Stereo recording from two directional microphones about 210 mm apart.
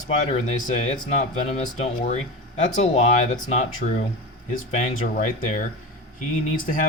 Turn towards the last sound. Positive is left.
turn(degrees=40)  # may be behind; listen again after turning